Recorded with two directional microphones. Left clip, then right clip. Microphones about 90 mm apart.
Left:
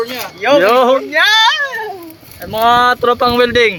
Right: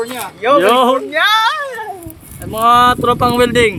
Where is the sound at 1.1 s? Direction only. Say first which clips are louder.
Left 2 dB; 35° right (ahead or behind).